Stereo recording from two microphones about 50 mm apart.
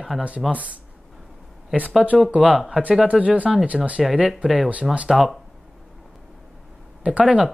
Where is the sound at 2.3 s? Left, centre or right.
Right.